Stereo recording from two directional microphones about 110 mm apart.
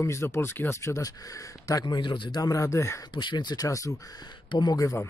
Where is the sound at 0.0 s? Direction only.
25° left (ahead or behind).